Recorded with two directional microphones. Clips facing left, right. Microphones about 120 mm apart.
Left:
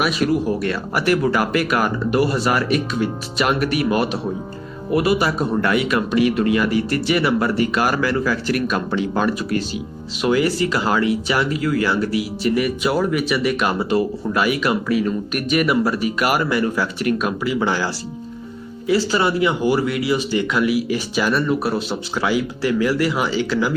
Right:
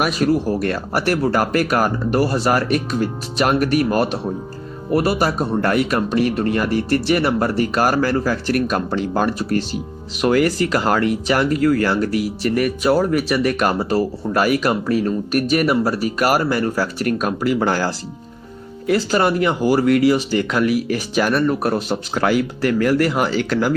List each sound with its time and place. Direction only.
0.0 s speech: 40° right (ahead or behind)